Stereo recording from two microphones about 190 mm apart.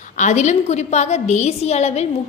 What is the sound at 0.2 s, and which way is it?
A woman's voice, 40° left (ahead or behind).